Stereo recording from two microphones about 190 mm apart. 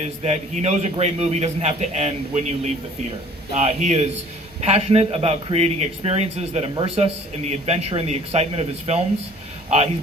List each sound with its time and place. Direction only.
0.0 s a man's voice: 35° right (ahead or behind)